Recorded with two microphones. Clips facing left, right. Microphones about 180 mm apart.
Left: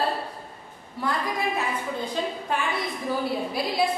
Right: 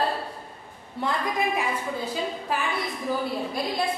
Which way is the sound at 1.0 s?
20° right (ahead or behind).